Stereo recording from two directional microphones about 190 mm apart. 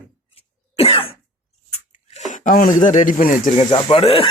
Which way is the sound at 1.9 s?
35° left (ahead or behind).